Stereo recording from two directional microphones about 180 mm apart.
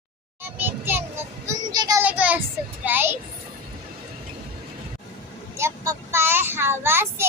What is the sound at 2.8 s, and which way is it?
Speech, 10° right (ahead or behind).